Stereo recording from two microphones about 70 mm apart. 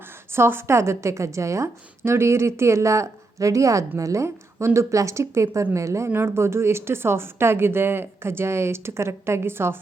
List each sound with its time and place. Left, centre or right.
0.3 s a woman's voice: right
6.1 s speech: right